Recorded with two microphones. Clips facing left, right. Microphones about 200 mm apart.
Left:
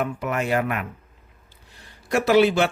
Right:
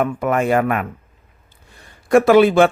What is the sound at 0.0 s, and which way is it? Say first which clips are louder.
Speech: right 7 dB; 50° right (ahead or behind).